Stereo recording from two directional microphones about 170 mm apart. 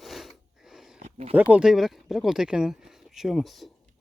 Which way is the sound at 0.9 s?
45° right (ahead or behind).